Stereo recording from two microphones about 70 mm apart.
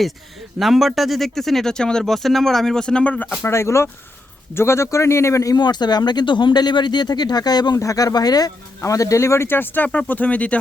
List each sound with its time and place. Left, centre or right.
0.6 s speech: centre
3.4 s speech: left
5.5 s speech: left
7.8 s speech: left
8.8 s speech: left; by 10.6 s centre